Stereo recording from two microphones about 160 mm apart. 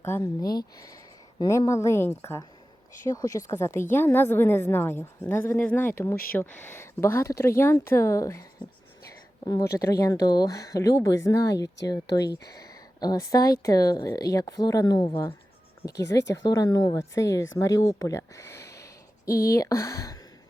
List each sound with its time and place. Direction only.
0.0 s speech: 20° left (ahead or behind)